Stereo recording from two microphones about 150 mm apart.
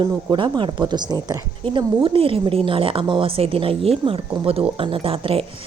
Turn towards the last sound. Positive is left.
turn(degrees=-40)  # may be behind; listen again after turning